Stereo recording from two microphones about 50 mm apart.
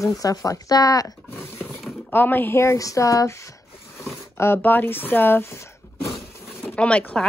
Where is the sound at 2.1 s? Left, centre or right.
Left.